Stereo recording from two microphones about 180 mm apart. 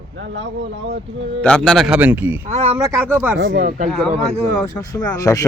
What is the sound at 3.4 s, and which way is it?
Speech, 90° right.